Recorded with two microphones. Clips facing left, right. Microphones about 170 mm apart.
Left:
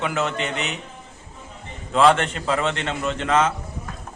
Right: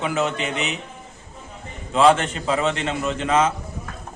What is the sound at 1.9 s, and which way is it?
Speech, 5° right (ahead or behind).